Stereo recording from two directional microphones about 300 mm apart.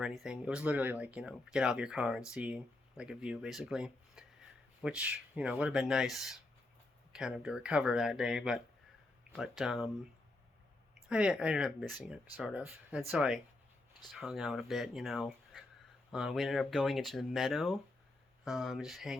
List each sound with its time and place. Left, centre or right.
0.0 s speech: centre
11.1 s speech: centre